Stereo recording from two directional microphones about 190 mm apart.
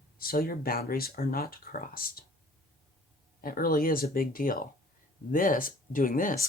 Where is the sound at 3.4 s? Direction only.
50° left (ahead or behind).